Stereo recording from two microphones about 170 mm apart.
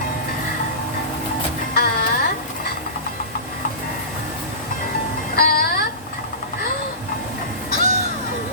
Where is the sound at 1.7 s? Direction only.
65° left (ahead or behind).